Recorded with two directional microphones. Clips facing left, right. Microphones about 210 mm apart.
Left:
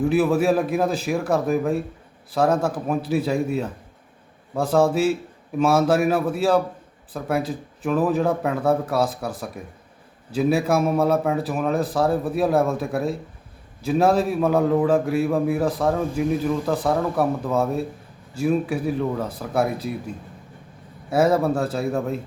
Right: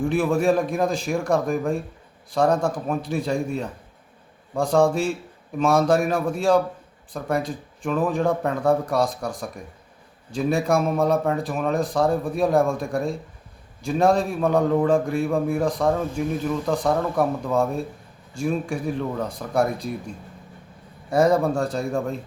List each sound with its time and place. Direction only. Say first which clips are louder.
0.0 s a man's voice: left 2 dB; 5° left (ahead or behind)
21.1 s a man's voice: even; 5° left (ahead or behind)